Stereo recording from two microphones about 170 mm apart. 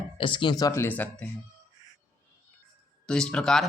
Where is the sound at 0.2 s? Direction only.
30° left (ahead or behind).